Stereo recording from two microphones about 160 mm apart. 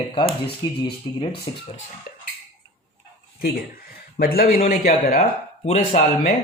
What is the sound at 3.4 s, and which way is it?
A man's voice, 70° left (ahead or behind).